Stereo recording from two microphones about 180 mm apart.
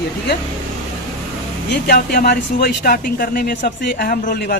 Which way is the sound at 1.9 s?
60° left (ahead or behind).